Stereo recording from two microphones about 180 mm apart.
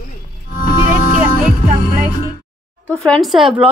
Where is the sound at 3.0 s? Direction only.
Centre (ahead or behind).